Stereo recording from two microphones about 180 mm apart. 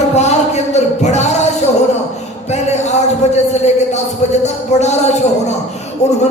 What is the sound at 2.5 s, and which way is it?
Speech, 40° left (ahead or behind).